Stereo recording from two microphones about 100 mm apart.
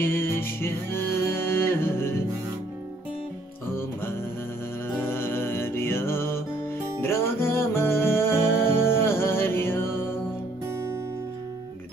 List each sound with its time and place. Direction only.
0.0 s music: 20° left (ahead or behind)
4.8 s music: 25° left (ahead or behind)